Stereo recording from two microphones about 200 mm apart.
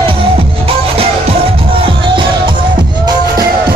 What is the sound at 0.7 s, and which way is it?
Music, 30° right (ahead or behind).